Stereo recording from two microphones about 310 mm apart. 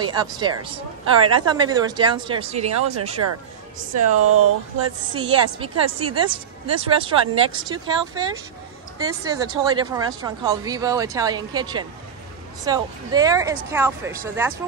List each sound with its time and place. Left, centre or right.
0.0 s a woman's voice: centre
3.9 s speech: right
4.8 s a woman's voice: centre